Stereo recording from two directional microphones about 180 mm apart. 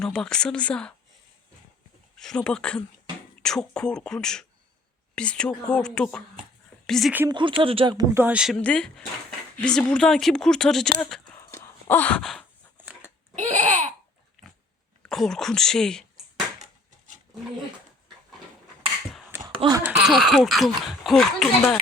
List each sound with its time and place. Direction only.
0.0 s speech: 5° left (ahead or behind)
2.1 s speech: 5° left (ahead or behind)
7.3 s speech: 25° right (ahead or behind); by 10.8 s 5° left (ahead or behind)
11.5 s wail: 15° left (ahead or behind)
12.7 s a sound: 10° right (ahead or behind)
13.3 s laughter: 40° right (ahead or behind)
15.0 s speech: centre (ahead or behind)
19.5 s speech: 25° right (ahead or behind)
20.0 s speech: centre (ahead or behind)